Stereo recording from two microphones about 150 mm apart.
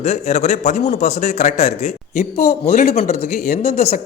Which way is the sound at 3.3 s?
85° left.